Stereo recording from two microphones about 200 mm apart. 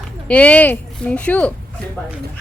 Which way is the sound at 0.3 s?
5° left (ahead or behind).